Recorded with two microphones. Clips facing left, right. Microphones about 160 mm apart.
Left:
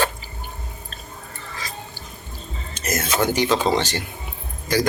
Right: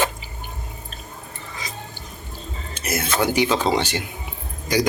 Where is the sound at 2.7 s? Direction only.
10° right (ahead or behind).